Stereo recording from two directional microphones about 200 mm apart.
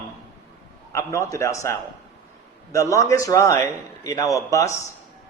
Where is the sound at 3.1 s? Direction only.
15° left (ahead or behind).